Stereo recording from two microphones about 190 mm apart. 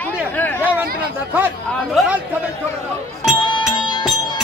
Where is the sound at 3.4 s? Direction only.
25° left (ahead or behind).